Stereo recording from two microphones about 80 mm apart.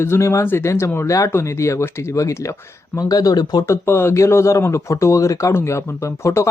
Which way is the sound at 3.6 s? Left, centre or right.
Left.